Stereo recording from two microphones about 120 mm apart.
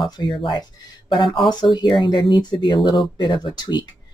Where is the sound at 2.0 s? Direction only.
40° left (ahead or behind).